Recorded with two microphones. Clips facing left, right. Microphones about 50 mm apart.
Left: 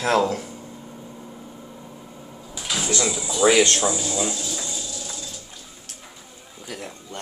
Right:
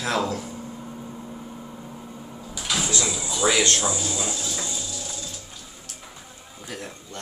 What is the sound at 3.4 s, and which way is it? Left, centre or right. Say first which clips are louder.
Speech: left 5 dB; left.